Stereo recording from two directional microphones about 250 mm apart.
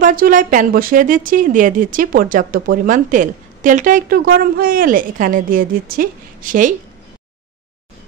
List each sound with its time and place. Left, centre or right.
0.0 s speech: right